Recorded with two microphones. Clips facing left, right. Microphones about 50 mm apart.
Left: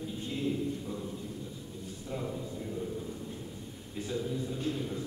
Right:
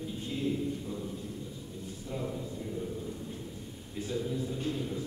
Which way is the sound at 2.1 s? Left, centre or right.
Centre.